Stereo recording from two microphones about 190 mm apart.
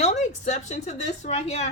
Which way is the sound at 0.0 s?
35° left (ahead or behind).